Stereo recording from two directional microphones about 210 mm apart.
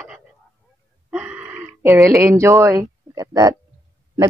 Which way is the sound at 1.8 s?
15° right (ahead or behind).